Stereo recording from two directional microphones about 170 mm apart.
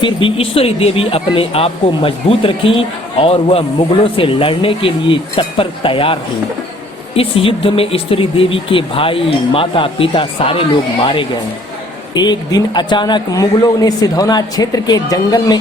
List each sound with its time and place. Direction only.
0.0 s a man's voice: 30° left (ahead or behind)